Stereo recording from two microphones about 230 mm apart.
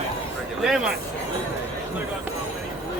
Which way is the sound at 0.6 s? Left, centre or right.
Centre.